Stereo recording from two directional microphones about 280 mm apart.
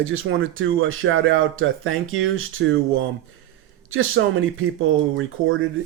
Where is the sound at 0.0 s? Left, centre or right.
Right.